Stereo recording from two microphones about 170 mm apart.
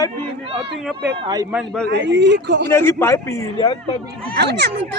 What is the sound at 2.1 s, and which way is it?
Speech, 90° right.